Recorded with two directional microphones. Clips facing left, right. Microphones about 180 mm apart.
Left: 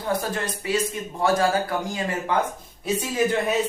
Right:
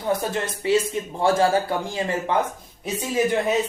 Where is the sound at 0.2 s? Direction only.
25° right (ahead or behind).